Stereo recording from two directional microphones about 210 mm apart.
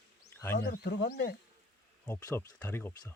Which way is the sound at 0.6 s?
50° left (ahead or behind).